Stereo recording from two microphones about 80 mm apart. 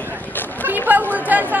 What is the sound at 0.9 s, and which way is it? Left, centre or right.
Chatter, right.